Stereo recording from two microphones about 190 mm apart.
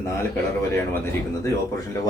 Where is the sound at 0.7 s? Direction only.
15° left (ahead or behind).